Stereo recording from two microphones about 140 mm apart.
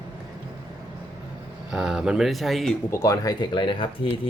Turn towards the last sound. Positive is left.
turn(degrees=35)  # may be behind; listen again after turning